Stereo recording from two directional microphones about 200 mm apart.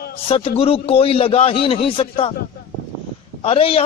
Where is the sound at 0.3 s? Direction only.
30° left (ahead or behind).